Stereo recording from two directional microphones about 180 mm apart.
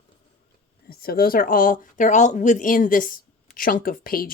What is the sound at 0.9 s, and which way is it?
Speech, 55° left (ahead or behind).